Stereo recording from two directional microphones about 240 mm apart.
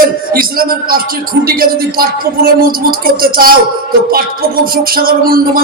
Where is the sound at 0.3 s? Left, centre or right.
Right.